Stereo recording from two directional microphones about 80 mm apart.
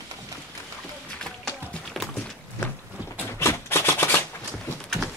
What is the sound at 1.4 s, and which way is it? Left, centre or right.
Music, centre.